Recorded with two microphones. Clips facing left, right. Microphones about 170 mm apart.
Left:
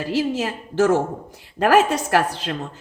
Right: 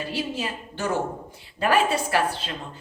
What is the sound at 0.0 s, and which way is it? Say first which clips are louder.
A woman's voice: left 7 dB; 85° left.